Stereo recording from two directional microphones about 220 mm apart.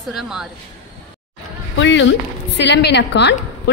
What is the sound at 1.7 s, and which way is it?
A woman's voice, 55° left (ahead or behind).